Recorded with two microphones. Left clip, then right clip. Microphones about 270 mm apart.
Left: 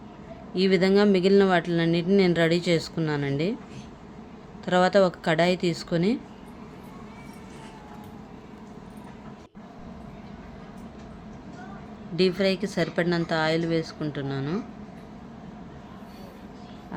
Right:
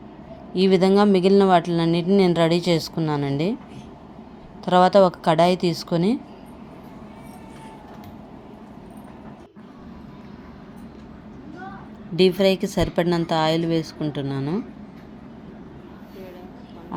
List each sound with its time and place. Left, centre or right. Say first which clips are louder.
0.5 s a woman's voice: right 4 dB; centre
4.6 s a woman's voice: right 5 dB; centre
12.1 s a woman's voice: right 6 dB; centre